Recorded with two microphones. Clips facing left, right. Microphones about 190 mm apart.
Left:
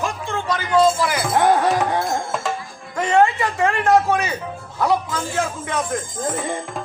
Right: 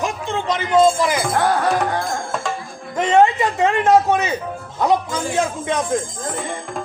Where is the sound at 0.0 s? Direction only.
20° right (ahead or behind).